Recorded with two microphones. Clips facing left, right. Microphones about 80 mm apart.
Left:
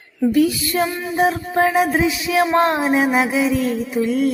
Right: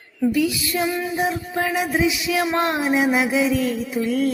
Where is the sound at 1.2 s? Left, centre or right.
Left.